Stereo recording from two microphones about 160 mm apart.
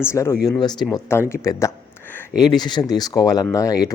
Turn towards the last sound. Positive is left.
turn(degrees=20)  # may be behind; listen again after turning